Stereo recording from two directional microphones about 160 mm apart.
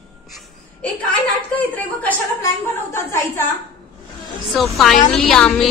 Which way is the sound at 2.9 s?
20° left (ahead or behind).